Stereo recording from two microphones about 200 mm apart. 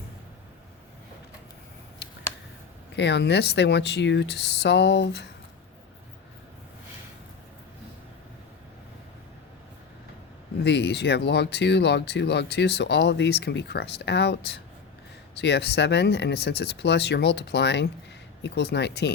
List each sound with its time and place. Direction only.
2.9 s speech: 60° left (ahead or behind)
10.6 s speech: 55° left (ahead or behind)